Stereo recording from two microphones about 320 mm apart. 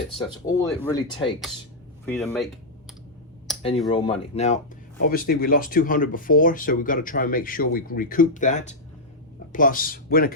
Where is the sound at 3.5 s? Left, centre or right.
Centre.